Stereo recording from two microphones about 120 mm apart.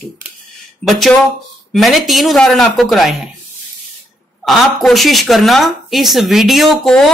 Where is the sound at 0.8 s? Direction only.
Centre (ahead or behind).